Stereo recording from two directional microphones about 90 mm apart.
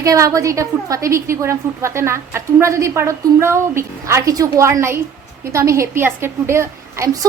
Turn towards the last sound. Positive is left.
turn(degrees=-30)  # may be behind; listen again after turning